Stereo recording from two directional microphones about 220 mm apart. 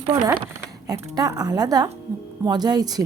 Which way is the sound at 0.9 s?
15° right (ahead or behind).